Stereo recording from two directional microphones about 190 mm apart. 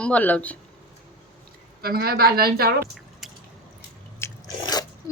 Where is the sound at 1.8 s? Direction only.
55° right (ahead or behind).